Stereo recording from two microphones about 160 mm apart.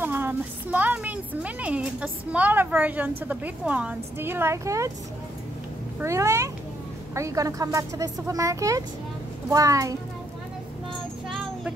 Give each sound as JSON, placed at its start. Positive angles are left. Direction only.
{"t": 0.0, "sound": "a woman's voice", "side_deg": -15}
{"t": 5.9, "sound": "a woman's voice", "side_deg": -15}
{"t": 11.2, "sound": "music", "side_deg": -5}